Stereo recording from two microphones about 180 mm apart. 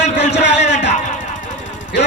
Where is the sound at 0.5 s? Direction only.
40° left (ahead or behind).